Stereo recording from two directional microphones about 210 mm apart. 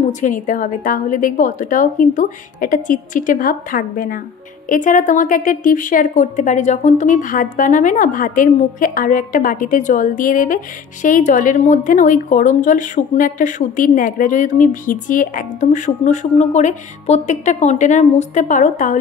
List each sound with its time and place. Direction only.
0.2 s a woman's voice: 40° left (ahead or behind)